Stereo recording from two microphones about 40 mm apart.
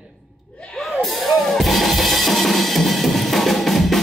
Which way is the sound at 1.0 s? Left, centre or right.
Centre.